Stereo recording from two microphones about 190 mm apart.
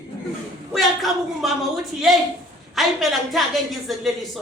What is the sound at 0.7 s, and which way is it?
Speech, centre (ahead or behind).